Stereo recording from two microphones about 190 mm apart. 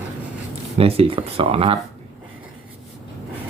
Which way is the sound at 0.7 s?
30° right (ahead or behind).